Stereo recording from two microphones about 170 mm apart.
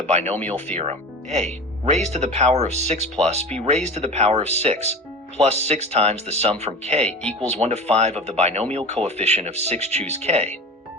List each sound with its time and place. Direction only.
0.3 s speech: 10° left (ahead or behind)
0.7 s speech: 40° right (ahead or behind)
7.1 s speech: 5° left (ahead or behind)
7.4 s speech: 40° right (ahead or behind)